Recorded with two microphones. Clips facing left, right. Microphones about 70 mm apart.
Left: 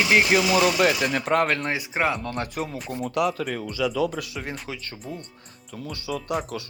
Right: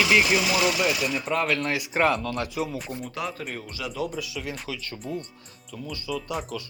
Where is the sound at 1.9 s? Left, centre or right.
Centre.